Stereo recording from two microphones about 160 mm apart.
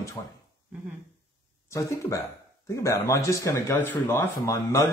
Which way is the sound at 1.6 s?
20° left (ahead or behind).